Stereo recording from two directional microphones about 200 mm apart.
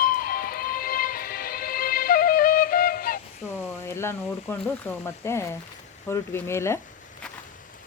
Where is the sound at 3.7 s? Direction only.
15° left (ahead or behind).